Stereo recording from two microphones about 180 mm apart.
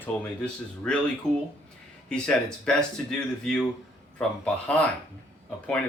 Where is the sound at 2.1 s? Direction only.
5° left (ahead or behind).